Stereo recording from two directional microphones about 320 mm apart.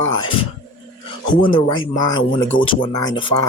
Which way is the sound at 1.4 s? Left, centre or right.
Centre.